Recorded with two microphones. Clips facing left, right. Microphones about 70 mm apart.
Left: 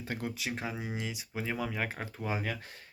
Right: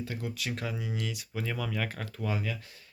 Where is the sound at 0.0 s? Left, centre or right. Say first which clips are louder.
Even; left.